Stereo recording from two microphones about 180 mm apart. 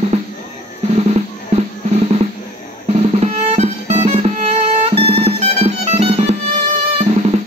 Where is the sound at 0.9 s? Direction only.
35° right (ahead or behind).